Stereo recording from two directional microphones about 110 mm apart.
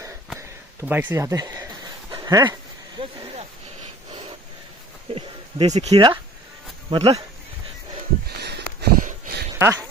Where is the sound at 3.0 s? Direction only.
50° right (ahead or behind).